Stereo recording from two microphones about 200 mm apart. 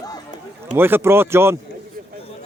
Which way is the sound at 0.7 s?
10° right (ahead or behind).